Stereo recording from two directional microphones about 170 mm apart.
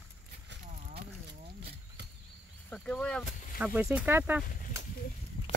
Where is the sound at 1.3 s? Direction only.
85° right.